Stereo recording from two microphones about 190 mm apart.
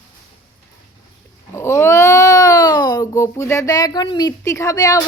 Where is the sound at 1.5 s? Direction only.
15° left (ahead or behind).